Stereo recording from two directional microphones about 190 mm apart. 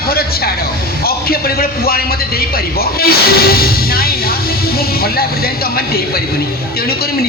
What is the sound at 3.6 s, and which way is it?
Speech, 50° left (ahead or behind).